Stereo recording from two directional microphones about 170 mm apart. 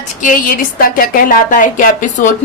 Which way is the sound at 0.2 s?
50° left (ahead or behind).